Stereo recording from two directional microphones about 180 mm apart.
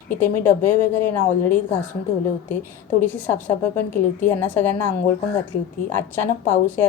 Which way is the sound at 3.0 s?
10° left (ahead or behind).